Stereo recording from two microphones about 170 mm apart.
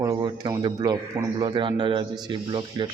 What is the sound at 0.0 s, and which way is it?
Speech, 25° right (ahead or behind).